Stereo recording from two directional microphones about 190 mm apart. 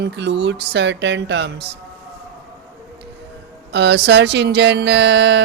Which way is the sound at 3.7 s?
65° right (ahead or behind).